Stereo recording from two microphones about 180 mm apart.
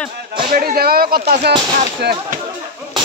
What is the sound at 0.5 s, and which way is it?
Speech, 55° right (ahead or behind).